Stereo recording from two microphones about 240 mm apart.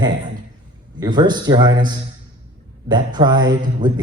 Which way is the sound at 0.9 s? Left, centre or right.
Centre.